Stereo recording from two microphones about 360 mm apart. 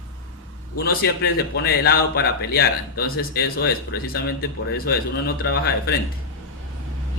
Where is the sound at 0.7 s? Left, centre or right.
Left.